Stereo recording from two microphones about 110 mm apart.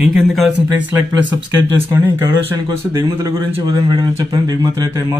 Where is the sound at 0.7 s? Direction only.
20° right (ahead or behind).